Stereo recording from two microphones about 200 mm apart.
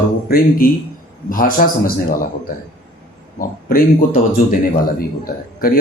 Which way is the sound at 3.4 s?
45° left (ahead or behind).